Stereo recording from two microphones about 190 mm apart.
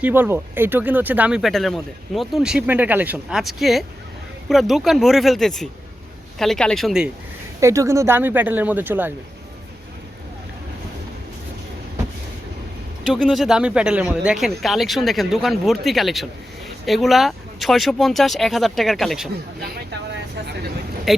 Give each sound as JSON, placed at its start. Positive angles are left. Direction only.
{"t": 0.0, "sound": "speech", "side_deg": -10}
{"t": 7.6, "sound": "speech", "side_deg": -15}
{"t": 13.1, "sound": "speech", "side_deg": 0}
{"t": 20.4, "sound": "vehicle", "side_deg": -60}
{"t": 21.1, "sound": "speech", "side_deg": 0}